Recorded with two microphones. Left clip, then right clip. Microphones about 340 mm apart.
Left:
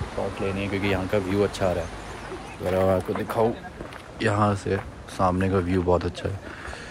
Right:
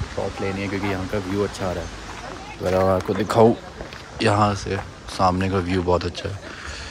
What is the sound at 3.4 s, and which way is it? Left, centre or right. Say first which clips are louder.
Speech: right 8 dB; right.